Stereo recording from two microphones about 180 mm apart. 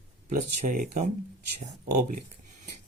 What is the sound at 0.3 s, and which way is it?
Speech, 45° right (ahead or behind).